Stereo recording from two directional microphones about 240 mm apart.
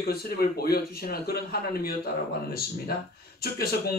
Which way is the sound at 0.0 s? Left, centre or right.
Left.